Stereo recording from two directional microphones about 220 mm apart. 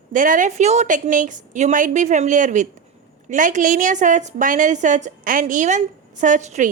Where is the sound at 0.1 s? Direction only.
35° right (ahead or behind).